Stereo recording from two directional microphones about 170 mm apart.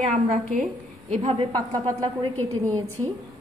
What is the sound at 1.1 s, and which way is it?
Speech, 35° right (ahead or behind).